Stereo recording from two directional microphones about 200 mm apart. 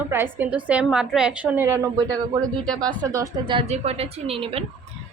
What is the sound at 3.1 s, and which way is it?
A woman's voice, 20° right (ahead or behind).